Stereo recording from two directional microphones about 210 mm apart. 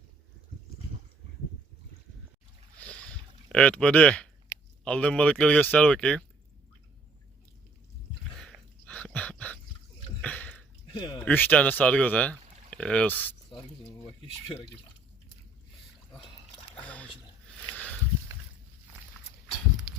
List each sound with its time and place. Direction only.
2.7 s boat: 5° left (ahead or behind)
3.5 s speech: 5° left (ahead or behind)
8.4 s a sound: 5° left (ahead or behind)
10.9 s speech: 20° left (ahead or behind)
11.3 s speech: 10° left (ahead or behind)
16.8 s rowboat: 5° left (ahead or behind)
17.7 s a sound: 5° left (ahead or behind)